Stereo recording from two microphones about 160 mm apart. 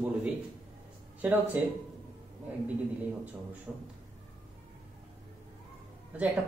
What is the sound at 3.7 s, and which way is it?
Speech, 10° right (ahead or behind).